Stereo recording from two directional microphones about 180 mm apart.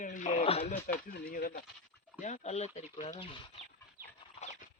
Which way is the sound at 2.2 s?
40° left (ahead or behind).